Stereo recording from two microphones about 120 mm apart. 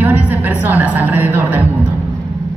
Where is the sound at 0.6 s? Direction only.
15° right (ahead or behind).